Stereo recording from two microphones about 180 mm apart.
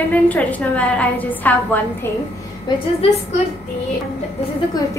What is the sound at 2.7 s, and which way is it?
Speech, 25° left (ahead or behind).